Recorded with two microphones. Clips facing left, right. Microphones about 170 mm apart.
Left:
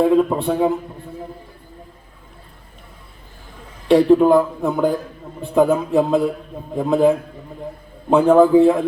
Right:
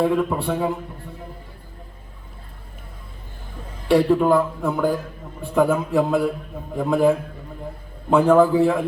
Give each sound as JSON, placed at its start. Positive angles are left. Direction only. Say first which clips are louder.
{"t": 0.0, "sound": "speech", "louder": "left 5 dB", "side_deg": 20}
{"t": 3.8, "sound": "speech", "louder": "left 4 dB", "side_deg": 20}